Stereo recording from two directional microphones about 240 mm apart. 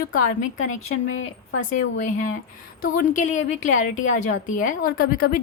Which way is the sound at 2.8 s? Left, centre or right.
Left.